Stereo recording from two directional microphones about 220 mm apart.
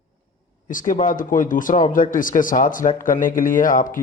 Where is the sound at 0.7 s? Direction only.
35° left (ahead or behind).